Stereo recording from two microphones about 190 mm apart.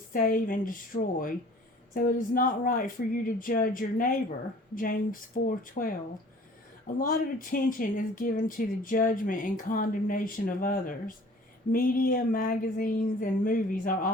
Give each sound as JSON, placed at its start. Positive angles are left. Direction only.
{"t": 0.1, "sound": "speech", "side_deg": 50}